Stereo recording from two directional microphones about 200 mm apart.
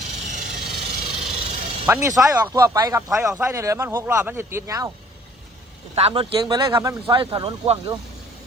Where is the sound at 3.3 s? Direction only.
15° right (ahead or behind).